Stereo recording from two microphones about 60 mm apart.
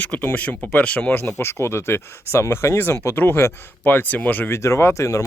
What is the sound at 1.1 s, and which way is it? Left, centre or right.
Speech, left.